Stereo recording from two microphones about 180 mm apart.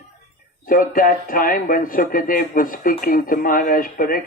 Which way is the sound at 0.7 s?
50° left (ahead or behind).